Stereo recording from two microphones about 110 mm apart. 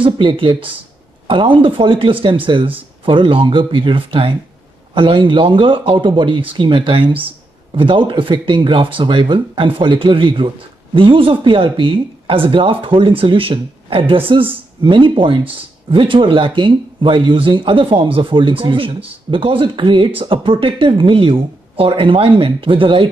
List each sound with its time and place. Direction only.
0.0 s speech: 50° right (ahead or behind)